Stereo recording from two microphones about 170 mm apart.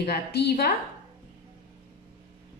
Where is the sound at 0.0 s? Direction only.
70° left (ahead or behind).